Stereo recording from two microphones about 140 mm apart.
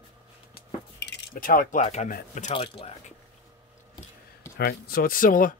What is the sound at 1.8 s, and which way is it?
Speech, 55° left (ahead or behind).